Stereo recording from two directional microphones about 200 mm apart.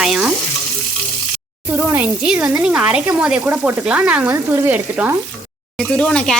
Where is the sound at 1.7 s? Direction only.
10° right (ahead or behind).